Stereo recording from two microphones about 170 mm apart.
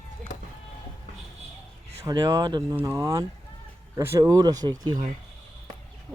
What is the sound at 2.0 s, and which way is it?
Speech, 25° right (ahead or behind).